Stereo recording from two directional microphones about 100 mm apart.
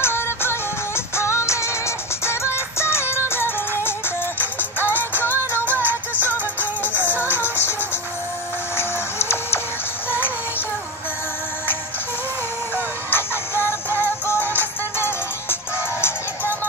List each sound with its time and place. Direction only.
0.0 s music: 25° left (ahead or behind)
5.7 s music: 20° right (ahead or behind)
7.3 s music: 25° left (ahead or behind)
8.7 s printer: 25° left (ahead or behind)
13.1 s music: 25° left (ahead or behind)